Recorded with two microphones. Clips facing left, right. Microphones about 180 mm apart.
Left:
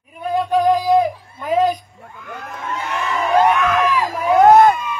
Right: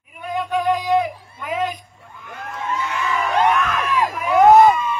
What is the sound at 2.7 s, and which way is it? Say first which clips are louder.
Crowd: even; 60° left (ahead or behind).